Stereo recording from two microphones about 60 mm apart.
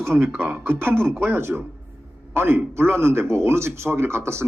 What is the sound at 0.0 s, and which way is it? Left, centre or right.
A man's voice, right.